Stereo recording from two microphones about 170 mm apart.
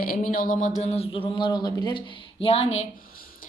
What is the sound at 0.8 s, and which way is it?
Speech, 35° left (ahead or behind).